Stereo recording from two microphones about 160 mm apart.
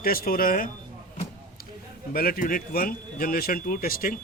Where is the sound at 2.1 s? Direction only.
65° left (ahead or behind).